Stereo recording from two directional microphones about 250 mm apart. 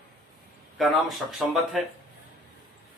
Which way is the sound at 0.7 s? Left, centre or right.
Centre.